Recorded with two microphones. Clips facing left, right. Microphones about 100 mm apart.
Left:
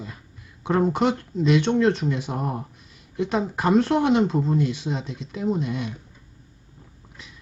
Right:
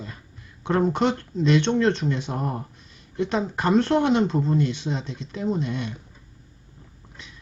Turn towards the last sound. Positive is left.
turn(degrees=5)  # may be behind; listen again after turning